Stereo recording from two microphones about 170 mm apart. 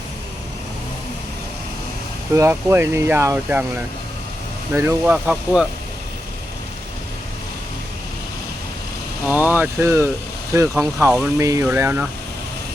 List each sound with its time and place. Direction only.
2.3 s speech: 15° right (ahead or behind)
9.2 s speech: 10° right (ahead or behind)